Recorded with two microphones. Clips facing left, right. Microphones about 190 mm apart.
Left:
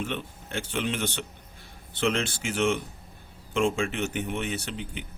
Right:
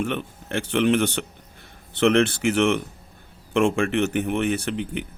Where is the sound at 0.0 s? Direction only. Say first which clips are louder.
Right 6 dB; 60° right (ahead or behind).